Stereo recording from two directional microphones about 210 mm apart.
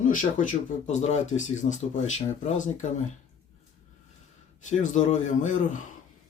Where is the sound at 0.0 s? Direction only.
40° left (ahead or behind).